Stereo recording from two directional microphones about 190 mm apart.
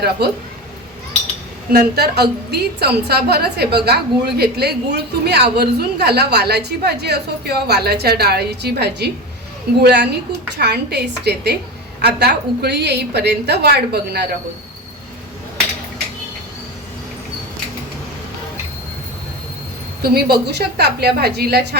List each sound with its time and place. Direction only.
0.2 s a woman's voice: 60° right (ahead or behind)
1.7 s a woman's voice: 55° right (ahead or behind)
20.0 s a woman's voice: 55° right (ahead or behind)